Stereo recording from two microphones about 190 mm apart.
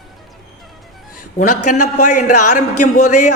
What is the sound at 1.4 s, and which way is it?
A man's voice, 40° left (ahead or behind).